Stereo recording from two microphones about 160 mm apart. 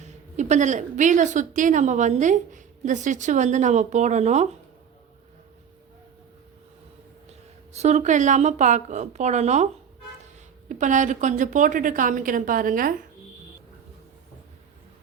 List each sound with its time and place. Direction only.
0.0 s a woman's voice: 45° right (ahead or behind)
7.7 s a woman's voice: 45° right (ahead or behind)
10.7 s a woman's voice: 50° right (ahead or behind)